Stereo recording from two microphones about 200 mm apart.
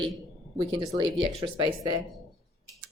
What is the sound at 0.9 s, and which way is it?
Speech, 25° right (ahead or behind).